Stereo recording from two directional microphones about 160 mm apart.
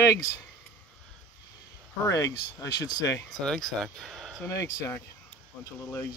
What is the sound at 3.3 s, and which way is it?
Speech, 5° left (ahead or behind).